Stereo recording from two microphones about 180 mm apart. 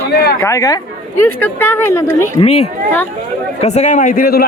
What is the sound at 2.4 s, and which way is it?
A man's voice, 35° left (ahead or behind).